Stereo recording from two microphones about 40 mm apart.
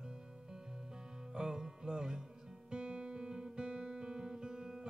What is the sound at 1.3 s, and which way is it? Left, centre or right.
Music, centre.